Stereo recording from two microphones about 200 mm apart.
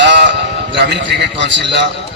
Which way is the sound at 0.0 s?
60° right (ahead or behind).